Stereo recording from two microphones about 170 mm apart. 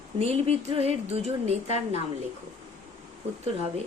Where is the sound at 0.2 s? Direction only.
35° right (ahead or behind).